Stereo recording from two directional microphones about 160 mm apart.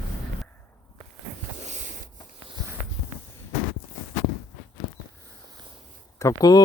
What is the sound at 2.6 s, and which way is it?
Walk, 25° right (ahead or behind).